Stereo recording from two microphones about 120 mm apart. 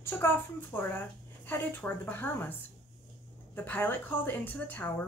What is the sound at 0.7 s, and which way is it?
A woman's voice, 15° left (ahead or behind).